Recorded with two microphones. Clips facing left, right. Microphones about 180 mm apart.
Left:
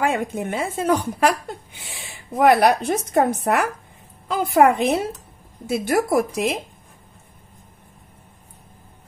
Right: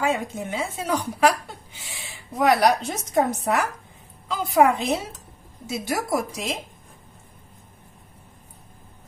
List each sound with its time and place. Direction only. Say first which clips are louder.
0.0 s a woman's voice: left 3 dB; 55° left (ahead or behind)